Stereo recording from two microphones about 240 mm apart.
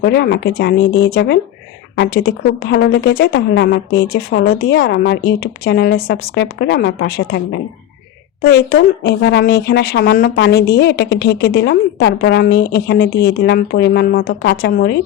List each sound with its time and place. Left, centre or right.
0.0 s speech: left